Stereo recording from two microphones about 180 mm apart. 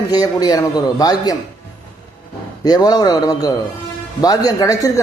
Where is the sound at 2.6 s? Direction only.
20° left (ahead or behind).